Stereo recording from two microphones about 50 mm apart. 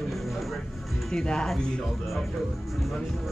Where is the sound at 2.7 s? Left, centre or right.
Centre.